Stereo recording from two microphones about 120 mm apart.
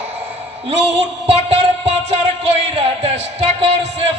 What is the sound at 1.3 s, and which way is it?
Music, 60° right (ahead or behind).